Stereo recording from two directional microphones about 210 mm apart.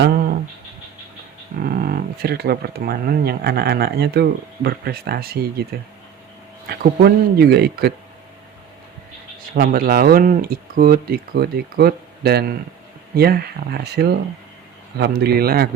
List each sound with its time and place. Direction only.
1.6 s speech: 45° right (ahead or behind)
6.7 s speech: 45° right (ahead or behind)
9.6 s speech: 45° right (ahead or behind)